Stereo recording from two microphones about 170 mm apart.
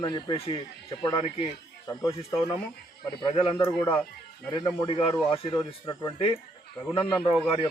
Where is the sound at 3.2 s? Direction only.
35° left (ahead or behind).